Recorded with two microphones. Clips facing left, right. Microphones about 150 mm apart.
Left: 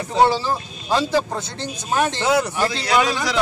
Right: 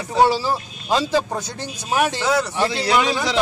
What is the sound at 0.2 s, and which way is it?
Speech, 10° right (ahead or behind).